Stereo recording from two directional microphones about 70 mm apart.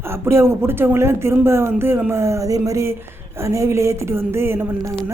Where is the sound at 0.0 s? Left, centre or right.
Right.